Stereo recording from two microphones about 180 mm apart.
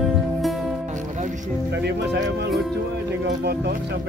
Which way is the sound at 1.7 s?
70° right (ahead or behind).